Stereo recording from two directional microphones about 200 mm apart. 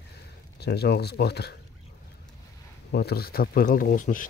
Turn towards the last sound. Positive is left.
turn(degrees=40)  # may be behind; listen again after turning